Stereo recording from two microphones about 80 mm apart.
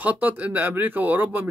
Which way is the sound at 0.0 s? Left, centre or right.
Right.